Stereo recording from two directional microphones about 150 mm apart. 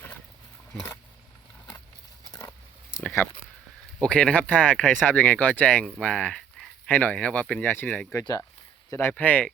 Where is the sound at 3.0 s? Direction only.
15° left (ahead or behind).